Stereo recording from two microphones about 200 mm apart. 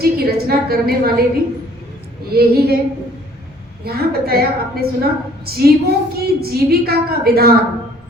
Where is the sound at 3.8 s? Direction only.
50° right (ahead or behind).